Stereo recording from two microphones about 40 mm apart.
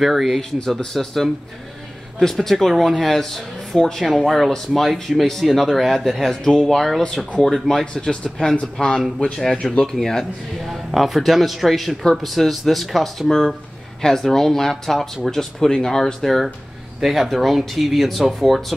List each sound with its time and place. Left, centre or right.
0.0 s speech: centre
0.9 s speech: centre
2.4 s speech: centre
10.6 s speech: centre
14.0 s speech: centre
16.2 s speech: centre